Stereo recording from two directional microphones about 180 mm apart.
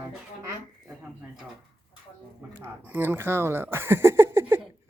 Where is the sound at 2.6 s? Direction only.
10° right (ahead or behind).